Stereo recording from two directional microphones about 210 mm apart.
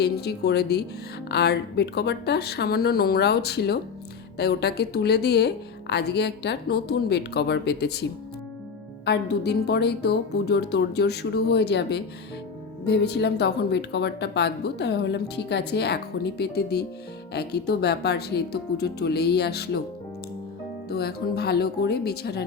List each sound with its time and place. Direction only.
0.0 s speech: 50° left (ahead or behind)
20.9 s speech: 50° left (ahead or behind)